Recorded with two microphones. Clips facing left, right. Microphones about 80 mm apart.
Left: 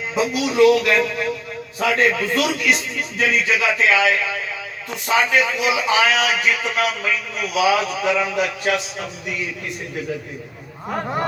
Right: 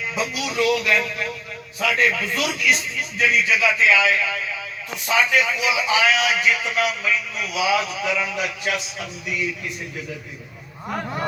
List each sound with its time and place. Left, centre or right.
0.1 s a man's voice: left
10.9 s speech: left